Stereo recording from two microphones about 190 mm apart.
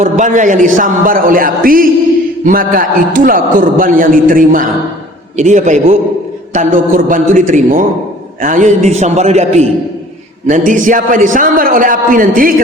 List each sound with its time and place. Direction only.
0.0 s a man's voice: 40° right (ahead or behind)